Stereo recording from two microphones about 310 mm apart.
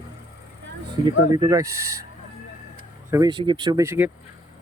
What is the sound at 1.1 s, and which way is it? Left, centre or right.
Speech, centre.